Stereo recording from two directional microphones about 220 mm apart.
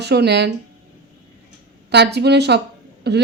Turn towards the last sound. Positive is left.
turn(degrees=-50)  # may be behind; listen again after turning